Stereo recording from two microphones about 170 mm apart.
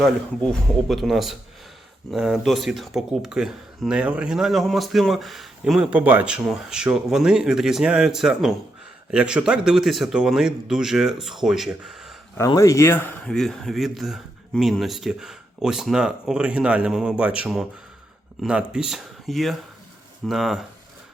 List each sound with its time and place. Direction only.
0.9 s speech: centre (ahead or behind)
12.4 s speech: 20° left (ahead or behind); by 20.7 s centre (ahead or behind)